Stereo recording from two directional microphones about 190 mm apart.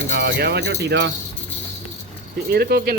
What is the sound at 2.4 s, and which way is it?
Speech, 55° right (ahead or behind).